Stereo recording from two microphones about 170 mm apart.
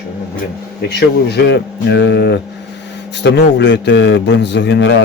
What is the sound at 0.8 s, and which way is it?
A man's voice, 75° left (ahead or behind).